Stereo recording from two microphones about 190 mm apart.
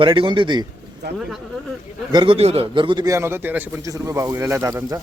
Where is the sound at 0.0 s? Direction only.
25° right (ahead or behind).